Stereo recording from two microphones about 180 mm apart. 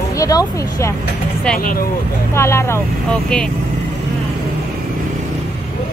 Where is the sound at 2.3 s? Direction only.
15° left (ahead or behind).